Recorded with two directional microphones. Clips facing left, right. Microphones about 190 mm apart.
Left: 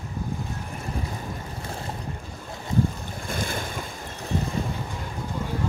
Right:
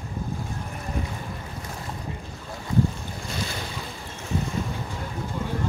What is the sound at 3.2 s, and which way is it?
Waves, 50° left (ahead or behind).